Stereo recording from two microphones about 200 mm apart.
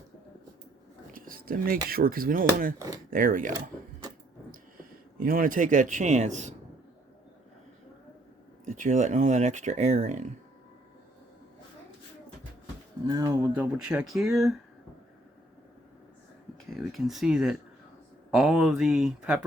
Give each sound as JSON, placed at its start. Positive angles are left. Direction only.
{"t": 1.1, "sound": "speech", "side_deg": -45}
{"t": 2.7, "sound": "speech", "side_deg": -20}
{"t": 3.1, "sound": "speech", "side_deg": -45}
{"t": 4.8, "sound": "a man's voice", "side_deg": -45}
{"t": 8.6, "sound": "speech", "side_deg": -40}
{"t": 13.1, "sound": "speech", "side_deg": -15}
{"t": 16.7, "sound": "speech", "side_deg": 0}